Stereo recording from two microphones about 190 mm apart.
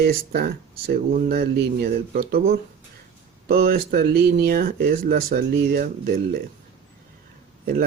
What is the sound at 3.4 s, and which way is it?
Speech, 55° right (ahead or behind).